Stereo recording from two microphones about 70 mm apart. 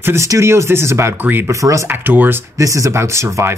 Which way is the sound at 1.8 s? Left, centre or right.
Right.